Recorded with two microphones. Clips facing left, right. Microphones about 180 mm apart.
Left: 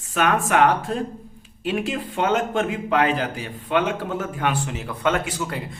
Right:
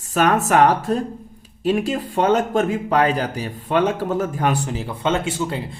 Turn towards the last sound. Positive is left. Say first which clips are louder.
# right 3 dB
turn(degrees=-25)  # may be behind; listen again after turning